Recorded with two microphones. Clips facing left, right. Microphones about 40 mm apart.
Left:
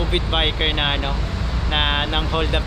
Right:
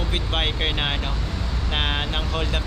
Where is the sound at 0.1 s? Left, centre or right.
Centre.